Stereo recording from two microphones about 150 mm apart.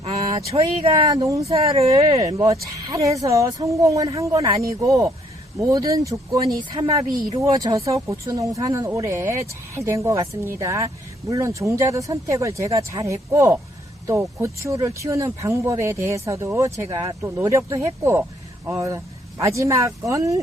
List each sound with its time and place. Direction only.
0.8 s speech: 40° right (ahead or behind)
1.0 s speech: 25° right (ahead or behind)
1.5 s speech: 40° right (ahead or behind)
2.1 s speech: 25° right (ahead or behind)